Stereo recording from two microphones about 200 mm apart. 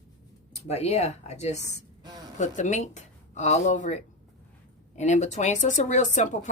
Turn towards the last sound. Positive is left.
turn(degrees=40)  # may be behind; listen again after turning